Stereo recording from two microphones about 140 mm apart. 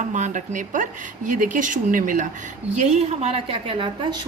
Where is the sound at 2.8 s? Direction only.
55° right (ahead or behind); by 4.2 s 35° right (ahead or behind).